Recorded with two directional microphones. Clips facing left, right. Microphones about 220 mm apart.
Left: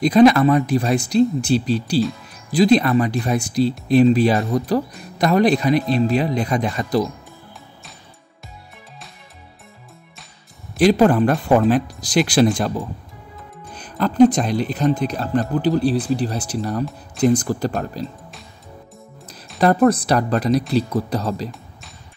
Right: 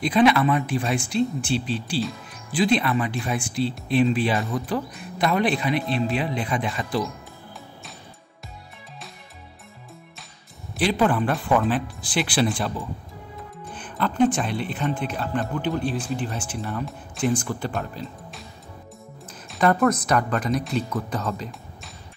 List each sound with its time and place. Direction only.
0.0 s a man's voice: 40° left (ahead or behind)
10.8 s a man's voice: 40° left (ahead or behind)
19.6 s a man's voice: 35° left (ahead or behind)